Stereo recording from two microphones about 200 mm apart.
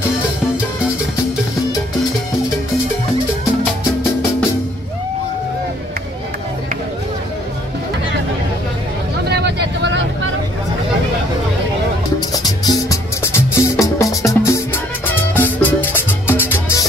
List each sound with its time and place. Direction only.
9.3 s vehicle: 60° right (ahead or behind)
12.4 s music: 15° left (ahead or behind)